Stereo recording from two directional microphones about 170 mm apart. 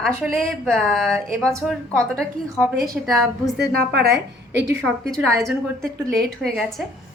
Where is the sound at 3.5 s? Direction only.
75° right (ahead or behind).